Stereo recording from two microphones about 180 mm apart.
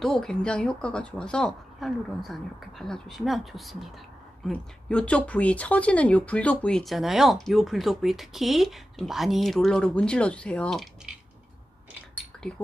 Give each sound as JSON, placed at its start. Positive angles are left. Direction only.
{"t": 0.0, "sound": "speech", "side_deg": 5}